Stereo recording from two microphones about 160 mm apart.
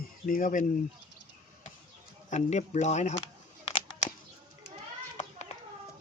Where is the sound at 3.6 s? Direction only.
45° left (ahead or behind).